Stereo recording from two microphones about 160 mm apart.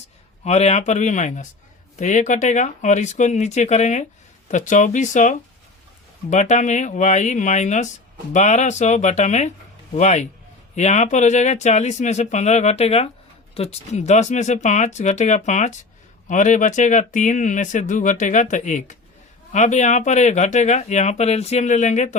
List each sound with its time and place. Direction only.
0.4 s speech: 45° left (ahead or behind)